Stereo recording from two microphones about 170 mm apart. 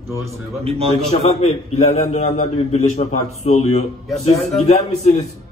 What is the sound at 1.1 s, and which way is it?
A man's voice, 40° left (ahead or behind).